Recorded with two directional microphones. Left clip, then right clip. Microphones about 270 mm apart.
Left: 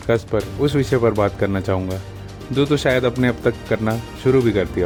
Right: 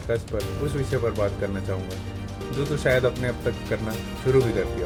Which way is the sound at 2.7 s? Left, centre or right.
Left.